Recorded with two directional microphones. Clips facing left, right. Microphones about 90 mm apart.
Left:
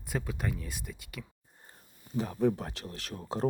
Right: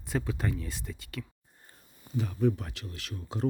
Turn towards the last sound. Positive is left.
turn(degrees=40)  # may be behind; listen again after turning